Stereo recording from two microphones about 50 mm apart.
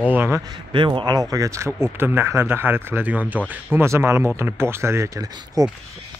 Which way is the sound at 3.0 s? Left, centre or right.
Right.